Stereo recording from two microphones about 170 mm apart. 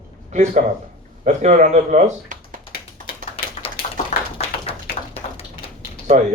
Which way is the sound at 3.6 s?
35° left (ahead or behind).